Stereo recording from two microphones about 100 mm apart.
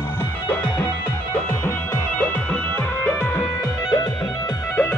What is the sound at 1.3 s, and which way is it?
Music, 25° left (ahead or behind).